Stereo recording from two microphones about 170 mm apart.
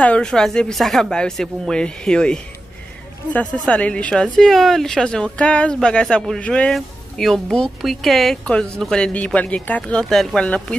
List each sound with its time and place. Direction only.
0.0 s a woman's voice: 5° left (ahead or behind)